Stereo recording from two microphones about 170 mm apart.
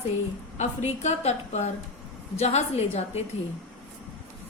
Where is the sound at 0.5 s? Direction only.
40° left (ahead or behind).